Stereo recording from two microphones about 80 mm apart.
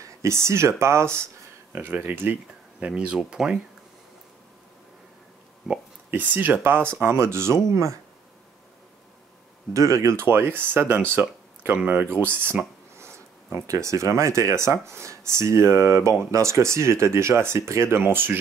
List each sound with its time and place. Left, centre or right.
0.0 s speech: right
2.8 s speech: centre
6.0 s speech: right
9.8 s speech: right